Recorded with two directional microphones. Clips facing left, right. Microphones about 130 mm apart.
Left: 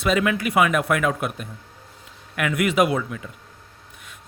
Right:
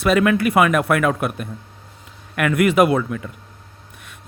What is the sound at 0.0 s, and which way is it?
Speech, 55° right (ahead or behind).